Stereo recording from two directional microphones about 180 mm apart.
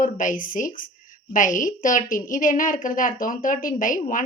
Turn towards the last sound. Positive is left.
turn(degrees=50)  # may be behind; listen again after turning